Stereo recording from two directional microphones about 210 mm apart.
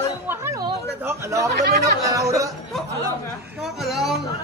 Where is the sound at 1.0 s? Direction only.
15° right (ahead or behind).